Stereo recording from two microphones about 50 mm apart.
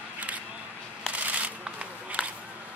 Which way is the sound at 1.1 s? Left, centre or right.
Right.